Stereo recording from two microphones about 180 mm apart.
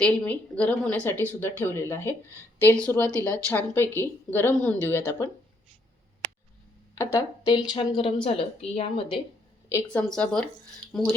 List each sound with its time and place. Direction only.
0.0 s speech: 5° left (ahead or behind)
7.0 s speech: 15° left (ahead or behind)
9.6 s a woman's voice: 20° left (ahead or behind)
10.0 s speech: 5° left (ahead or behind)